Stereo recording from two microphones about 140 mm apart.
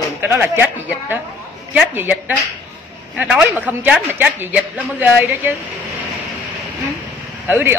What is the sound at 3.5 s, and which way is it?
A man's voice, 10° right (ahead or behind).